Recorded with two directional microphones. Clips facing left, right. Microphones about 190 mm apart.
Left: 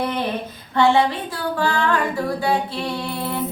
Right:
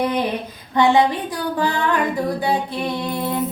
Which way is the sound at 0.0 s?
15° right (ahead or behind).